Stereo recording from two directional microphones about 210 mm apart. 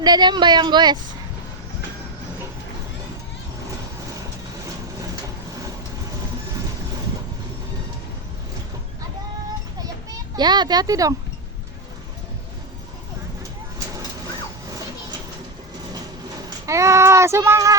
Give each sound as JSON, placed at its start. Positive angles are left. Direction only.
{"t": 0.0, "sound": "speech", "side_deg": -20}
{"t": 10.3, "sound": "speech", "side_deg": -20}
{"t": 16.6, "sound": "speech", "side_deg": -15}